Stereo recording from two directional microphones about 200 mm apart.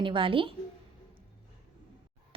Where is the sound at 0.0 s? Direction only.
25° right (ahead or behind).